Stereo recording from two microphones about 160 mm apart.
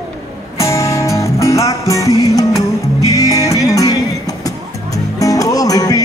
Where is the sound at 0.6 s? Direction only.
20° left (ahead or behind).